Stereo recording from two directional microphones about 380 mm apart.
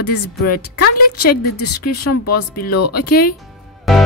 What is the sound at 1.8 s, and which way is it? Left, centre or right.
Speech, left.